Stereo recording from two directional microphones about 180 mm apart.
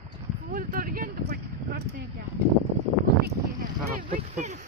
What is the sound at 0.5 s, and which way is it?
Speech, 50° right (ahead or behind).